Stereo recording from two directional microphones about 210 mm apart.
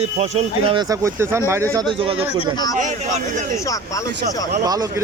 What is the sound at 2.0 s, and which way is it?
Speech, 25° right (ahead or behind).